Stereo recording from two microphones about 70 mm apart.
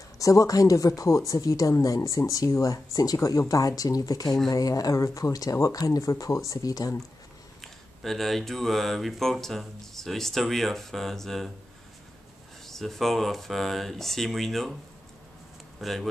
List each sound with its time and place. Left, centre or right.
0.2 s a woman's voice: left
7.6 s speech: centre
12.6 s speech: centre
15.8 s speech: centre